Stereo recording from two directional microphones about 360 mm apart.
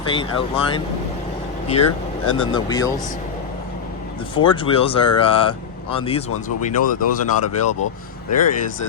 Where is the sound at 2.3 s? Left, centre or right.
Centre.